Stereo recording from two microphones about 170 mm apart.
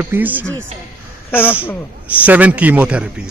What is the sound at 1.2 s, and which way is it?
Speech, 10° left (ahead or behind).